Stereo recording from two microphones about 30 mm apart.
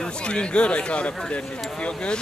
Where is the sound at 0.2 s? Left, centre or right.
Left.